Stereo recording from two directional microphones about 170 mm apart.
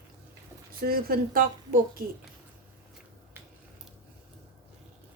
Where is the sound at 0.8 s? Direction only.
60° right (ahead or behind).